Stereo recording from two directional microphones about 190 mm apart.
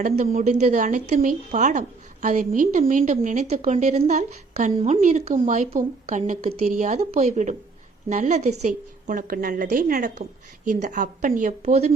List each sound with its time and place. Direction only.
0.0 s a woman's voice: 35° right (ahead or behind)